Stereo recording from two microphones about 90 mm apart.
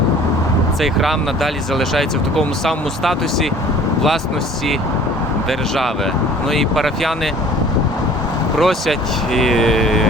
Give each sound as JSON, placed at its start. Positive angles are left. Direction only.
{"t": 0.8, "sound": "speech", "side_deg": 0}
{"t": 5.5, "sound": "speech", "side_deg": 0}
{"t": 8.5, "sound": "speech", "side_deg": 0}